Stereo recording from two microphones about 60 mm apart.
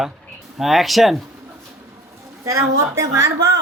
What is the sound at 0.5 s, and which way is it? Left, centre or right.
Speech, centre.